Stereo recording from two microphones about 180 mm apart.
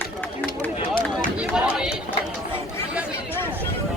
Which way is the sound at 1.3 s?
5° right (ahead or behind).